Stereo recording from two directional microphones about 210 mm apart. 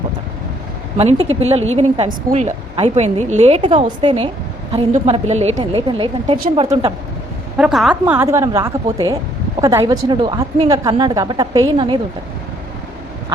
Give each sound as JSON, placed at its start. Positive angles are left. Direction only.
{"t": 0.9, "sound": "a woman's voice", "side_deg": -30}
{"t": 7.5, "sound": "a woman's voice", "side_deg": -5}